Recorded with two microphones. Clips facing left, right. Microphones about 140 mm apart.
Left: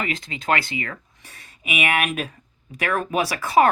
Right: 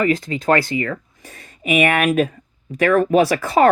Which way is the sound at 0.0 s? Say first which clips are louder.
Right 10 dB; 40° right (ahead or behind).